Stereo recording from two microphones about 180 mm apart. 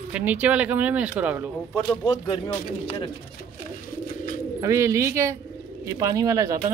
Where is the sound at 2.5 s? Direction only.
25° left (ahead or behind).